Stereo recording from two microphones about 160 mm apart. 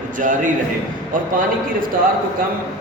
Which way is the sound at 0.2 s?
55° right (ahead or behind).